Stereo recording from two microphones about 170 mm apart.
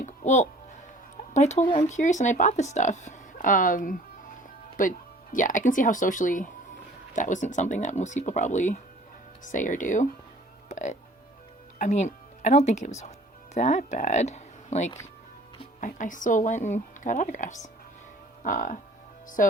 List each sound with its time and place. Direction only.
0.0 s music: 45° left (ahead or behind)
1.3 s speech: 40° left (ahead or behind)